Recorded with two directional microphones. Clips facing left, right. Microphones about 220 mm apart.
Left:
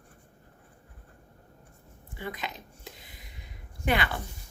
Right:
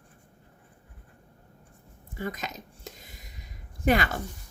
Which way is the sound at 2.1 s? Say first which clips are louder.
Right 3 dB; 45° right (ahead or behind).